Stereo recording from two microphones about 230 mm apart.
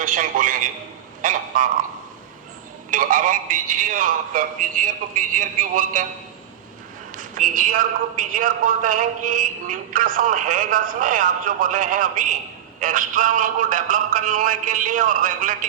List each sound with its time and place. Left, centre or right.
0.0 s a man's voice: right
2.9 s a man's voice: right
7.2 s a man's voice: right